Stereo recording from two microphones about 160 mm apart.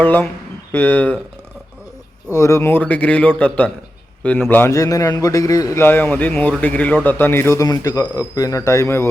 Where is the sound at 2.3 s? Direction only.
20° left (ahead or behind).